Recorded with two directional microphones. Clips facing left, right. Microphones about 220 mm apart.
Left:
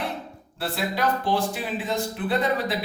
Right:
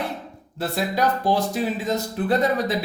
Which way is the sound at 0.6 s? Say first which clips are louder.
Right 3 dB; 40° right (ahead or behind).